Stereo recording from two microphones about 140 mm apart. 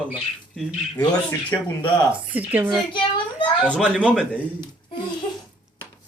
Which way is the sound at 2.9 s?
35° left (ahead or behind).